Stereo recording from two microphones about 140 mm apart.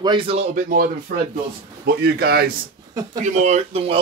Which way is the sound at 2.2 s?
90° right.